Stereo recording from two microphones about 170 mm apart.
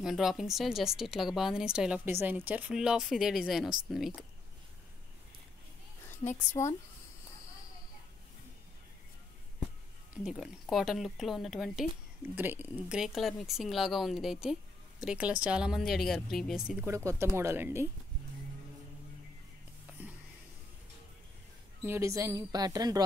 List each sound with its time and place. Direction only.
0.0 s speech: centre (ahead or behind)
6.0 s a woman's voice: 15° left (ahead or behind)
10.1 s speech: 5° right (ahead or behind)
16.9 s speech: 15° right (ahead or behind)
19.9 s a sound: 10° right (ahead or behind)
21.8 s speech: 15° right (ahead or behind)